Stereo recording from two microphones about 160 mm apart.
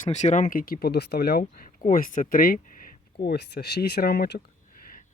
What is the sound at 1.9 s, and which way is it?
Speech, 55° left (ahead or behind).